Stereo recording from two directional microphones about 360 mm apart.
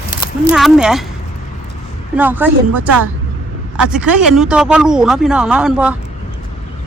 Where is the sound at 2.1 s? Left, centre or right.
Centre.